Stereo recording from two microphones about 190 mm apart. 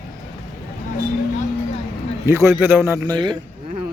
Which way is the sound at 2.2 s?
15° right (ahead or behind).